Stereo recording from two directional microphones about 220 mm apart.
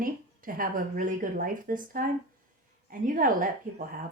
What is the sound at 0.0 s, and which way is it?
A woman's voice, 40° right (ahead or behind).